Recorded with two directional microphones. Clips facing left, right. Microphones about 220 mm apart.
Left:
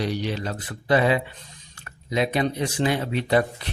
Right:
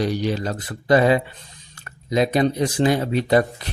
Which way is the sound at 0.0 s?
45° right (ahead or behind).